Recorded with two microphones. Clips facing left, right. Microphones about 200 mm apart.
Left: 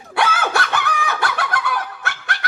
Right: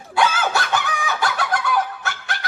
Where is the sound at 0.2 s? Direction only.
60° left (ahead or behind).